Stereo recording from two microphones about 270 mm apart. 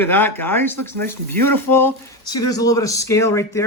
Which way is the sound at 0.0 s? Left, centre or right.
Centre.